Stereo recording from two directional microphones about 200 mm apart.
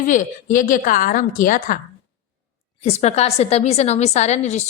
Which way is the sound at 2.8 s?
30° left (ahead or behind).